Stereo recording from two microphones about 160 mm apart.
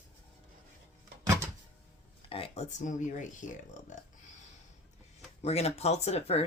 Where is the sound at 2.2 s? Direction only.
35° left (ahead or behind); by 3.9 s 50° left (ahead or behind).